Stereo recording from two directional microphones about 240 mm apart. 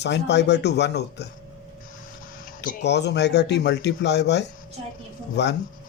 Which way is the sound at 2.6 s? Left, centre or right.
Left.